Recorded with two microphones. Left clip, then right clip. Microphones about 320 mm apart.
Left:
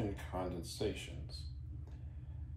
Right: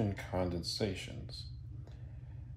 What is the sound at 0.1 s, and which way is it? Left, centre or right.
Speech, right.